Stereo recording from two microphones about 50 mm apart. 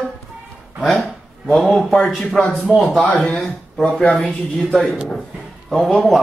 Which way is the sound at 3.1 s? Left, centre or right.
Left.